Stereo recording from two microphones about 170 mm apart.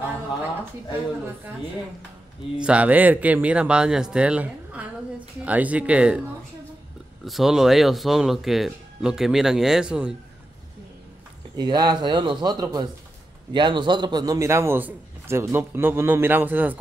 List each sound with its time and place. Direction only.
2.5 s a man's voice: 5° right (ahead or behind)
7.2 s speech: centre (ahead or behind)
11.5 s a man's voice: 25° right (ahead or behind)